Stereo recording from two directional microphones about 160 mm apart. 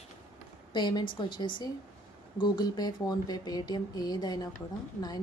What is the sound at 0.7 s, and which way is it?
A woman's voice, 30° left (ahead or behind).